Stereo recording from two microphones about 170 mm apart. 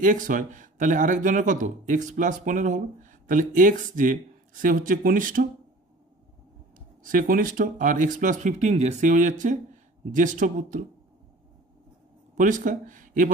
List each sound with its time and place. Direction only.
0.0 s speech: 50° right (ahead or behind)
7.0 s speech: 55° right (ahead or behind)
12.4 s speech: 50° right (ahead or behind)